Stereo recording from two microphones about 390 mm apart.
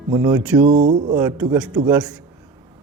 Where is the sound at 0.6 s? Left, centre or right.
Centre.